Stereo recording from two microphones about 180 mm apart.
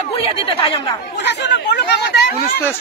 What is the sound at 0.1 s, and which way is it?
Speech, 30° left (ahead or behind).